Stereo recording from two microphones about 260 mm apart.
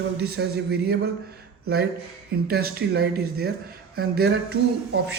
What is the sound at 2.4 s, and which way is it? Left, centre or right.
Speech, right.